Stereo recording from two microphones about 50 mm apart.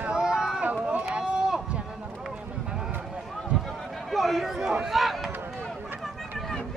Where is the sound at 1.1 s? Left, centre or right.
Centre.